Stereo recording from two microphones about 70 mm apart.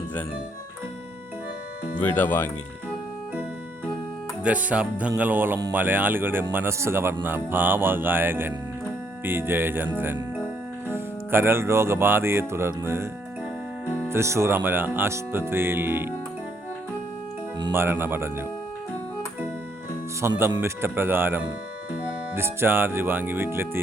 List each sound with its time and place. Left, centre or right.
2.0 s speech: left
4.4 s speech: centre; by 13.1 s right
14.1 s speech: right
17.7 s speech: right
20.2 s speech: right